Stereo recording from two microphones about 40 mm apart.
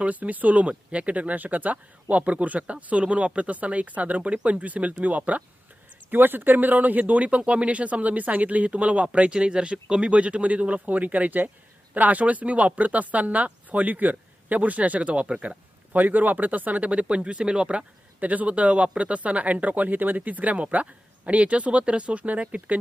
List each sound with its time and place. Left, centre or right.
0.0 s speech: right
6.1 s speech: right
9.3 s speech: right
15.9 s speech: right
18.2 s speech: right